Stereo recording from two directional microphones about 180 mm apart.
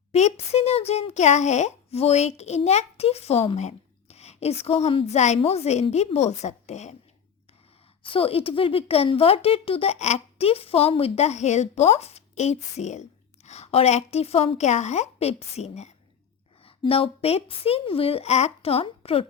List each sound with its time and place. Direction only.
0.1 s speech: 35° left (ahead or behind)
8.0 s speech: 30° left (ahead or behind)